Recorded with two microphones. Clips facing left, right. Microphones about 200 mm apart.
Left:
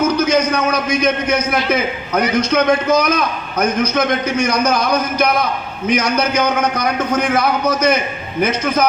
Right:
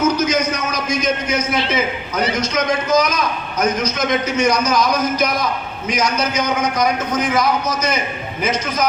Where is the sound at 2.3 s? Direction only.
60° left (ahead or behind).